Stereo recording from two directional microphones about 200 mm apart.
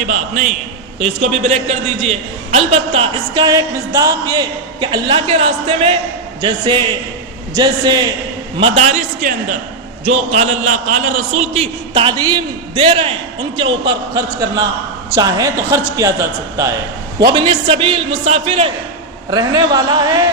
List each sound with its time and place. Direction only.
0.1 s a man's voice: 40° right (ahead or behind); by 8.0 s 20° right (ahead or behind)
8.6 s a man's voice: 35° right (ahead or behind)
11.6 s a man's voice: 25° right (ahead or behind)
17.2 s a man's voice: 20° right (ahead or behind)